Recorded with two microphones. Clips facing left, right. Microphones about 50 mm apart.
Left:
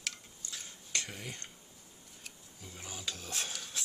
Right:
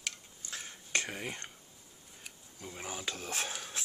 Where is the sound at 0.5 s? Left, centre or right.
Right.